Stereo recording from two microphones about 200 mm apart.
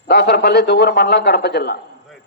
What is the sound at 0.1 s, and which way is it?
A man's voice, 55° left (ahead or behind).